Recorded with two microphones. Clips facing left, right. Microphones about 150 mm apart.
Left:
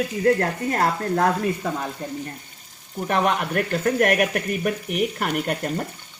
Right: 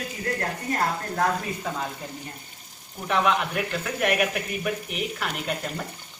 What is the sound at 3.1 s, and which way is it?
Speech, 45° left (ahead or behind).